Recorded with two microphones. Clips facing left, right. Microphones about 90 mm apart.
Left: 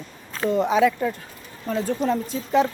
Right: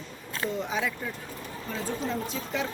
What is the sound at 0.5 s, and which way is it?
Speech, 70° left (ahead or behind).